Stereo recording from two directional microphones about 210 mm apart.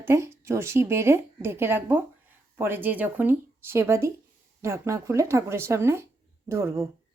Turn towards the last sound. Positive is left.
turn(degrees=-10)  # may be behind; listen again after turning